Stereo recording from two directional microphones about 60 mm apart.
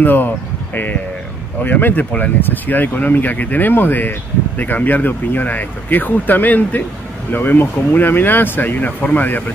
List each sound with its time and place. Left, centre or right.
0.0 s speech: left
1.6 s speech: left